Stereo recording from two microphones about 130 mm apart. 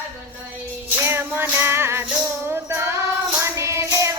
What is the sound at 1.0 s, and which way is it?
Music, 15° right (ahead or behind).